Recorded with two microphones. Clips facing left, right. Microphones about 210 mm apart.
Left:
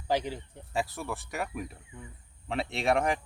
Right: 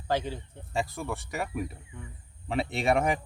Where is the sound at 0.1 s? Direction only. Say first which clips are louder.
Even; 15° left (ahead or behind).